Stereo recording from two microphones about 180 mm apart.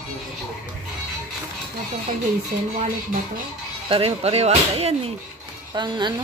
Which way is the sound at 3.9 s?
35° right (ahead or behind).